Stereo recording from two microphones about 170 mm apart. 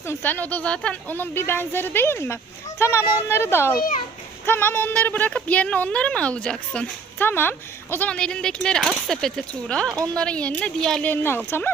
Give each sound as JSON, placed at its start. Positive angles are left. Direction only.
{"t": 0.1, "sound": "a woman's voice", "side_deg": 10}
{"t": 3.8, "sound": "a child's voice", "side_deg": 50}
{"t": 4.4, "sound": "a woman's voice", "side_deg": 10}